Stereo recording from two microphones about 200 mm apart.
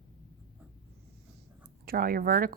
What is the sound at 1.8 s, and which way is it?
Speech, 50° right (ahead or behind).